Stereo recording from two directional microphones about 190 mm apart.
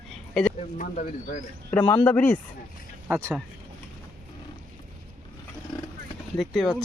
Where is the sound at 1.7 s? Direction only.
10° left (ahead or behind).